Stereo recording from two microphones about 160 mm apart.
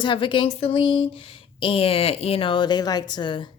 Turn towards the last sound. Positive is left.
turn(degrees=30)  # may be behind; listen again after turning